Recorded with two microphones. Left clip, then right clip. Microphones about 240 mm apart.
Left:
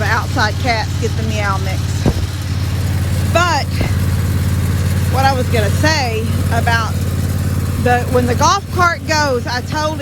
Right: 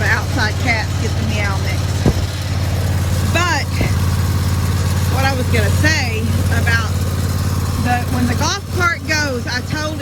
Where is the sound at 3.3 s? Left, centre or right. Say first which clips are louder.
Left 3 dB; centre.